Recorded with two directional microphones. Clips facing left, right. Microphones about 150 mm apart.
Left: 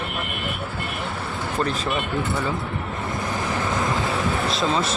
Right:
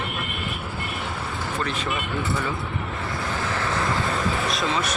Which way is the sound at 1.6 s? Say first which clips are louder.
Left 5 dB; 35° left (ahead or behind).